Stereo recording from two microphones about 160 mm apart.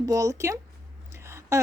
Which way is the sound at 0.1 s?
20° right (ahead or behind).